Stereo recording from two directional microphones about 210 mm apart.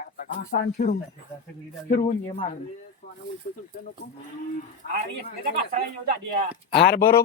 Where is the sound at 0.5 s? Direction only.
45° left (ahead or behind).